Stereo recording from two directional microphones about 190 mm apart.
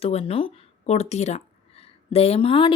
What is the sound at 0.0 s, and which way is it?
Speech, 30° left (ahead or behind).